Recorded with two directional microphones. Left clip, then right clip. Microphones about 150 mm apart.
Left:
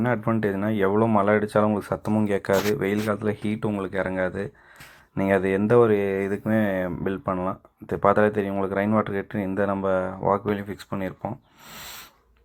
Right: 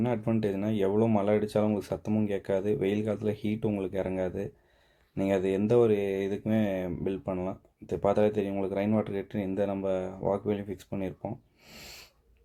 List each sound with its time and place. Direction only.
0.0 s speech: 5° right (ahead or behind)
2.7 s speech: 10° right (ahead or behind)